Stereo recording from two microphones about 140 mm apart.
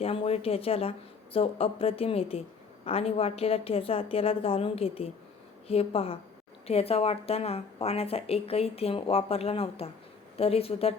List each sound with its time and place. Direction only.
0.0 s a woman's voice: 45° left (ahead or behind)